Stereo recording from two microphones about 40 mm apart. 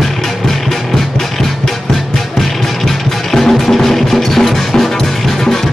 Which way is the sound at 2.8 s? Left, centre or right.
Centre.